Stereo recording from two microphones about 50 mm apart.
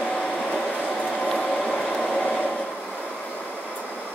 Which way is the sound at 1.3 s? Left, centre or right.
Centre.